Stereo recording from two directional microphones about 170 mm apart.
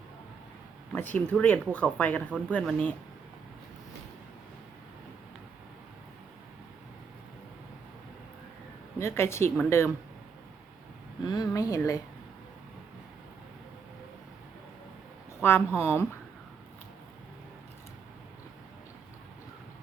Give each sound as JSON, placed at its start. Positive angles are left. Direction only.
{"t": 0.9, "sound": "speech", "side_deg": 10}
{"t": 9.0, "sound": "speech", "side_deg": 15}
{"t": 11.3, "sound": "speech", "side_deg": 20}
{"t": 15.4, "sound": "speech", "side_deg": 15}